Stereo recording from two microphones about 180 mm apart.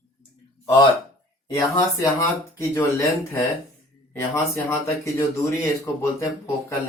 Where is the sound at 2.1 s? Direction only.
15° left (ahead or behind).